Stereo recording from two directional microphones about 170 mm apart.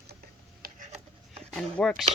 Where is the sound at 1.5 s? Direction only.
5° left (ahead or behind).